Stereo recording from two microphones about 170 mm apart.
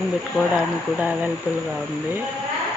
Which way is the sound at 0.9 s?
10° right (ahead or behind).